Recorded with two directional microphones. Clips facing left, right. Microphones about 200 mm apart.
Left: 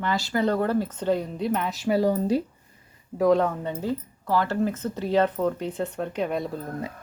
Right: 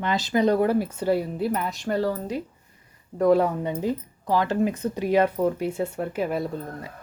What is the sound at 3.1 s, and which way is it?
Speech, 5° right (ahead or behind).